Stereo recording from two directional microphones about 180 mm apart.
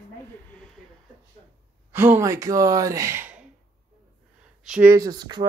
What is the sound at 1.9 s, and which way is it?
Speech, 10° right (ahead or behind).